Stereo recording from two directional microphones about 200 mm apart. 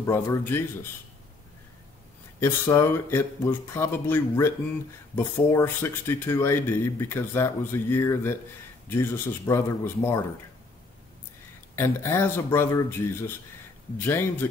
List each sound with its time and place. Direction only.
0.0 s speech: 15° left (ahead or behind)
2.4 s speech: 15° left (ahead or behind)
11.7 s speech: 10° left (ahead or behind)
13.9 s speech: 10° left (ahead or behind)